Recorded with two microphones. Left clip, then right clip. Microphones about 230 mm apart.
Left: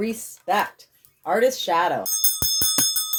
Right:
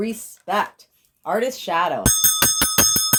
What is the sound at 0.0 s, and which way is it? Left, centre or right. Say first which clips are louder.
Speech: even; right.